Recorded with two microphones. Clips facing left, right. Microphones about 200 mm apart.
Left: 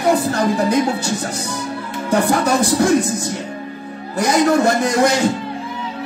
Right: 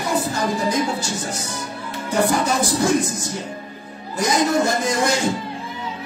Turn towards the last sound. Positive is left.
turn(degrees=65)  # may be behind; listen again after turning